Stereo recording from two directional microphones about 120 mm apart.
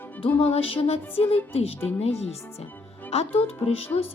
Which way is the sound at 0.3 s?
55° left (ahead or behind).